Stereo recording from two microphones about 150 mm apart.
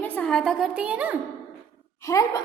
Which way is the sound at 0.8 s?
10° right (ahead or behind).